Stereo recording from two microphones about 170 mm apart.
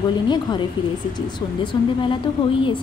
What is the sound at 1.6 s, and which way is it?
Speech, 30° left (ahead or behind).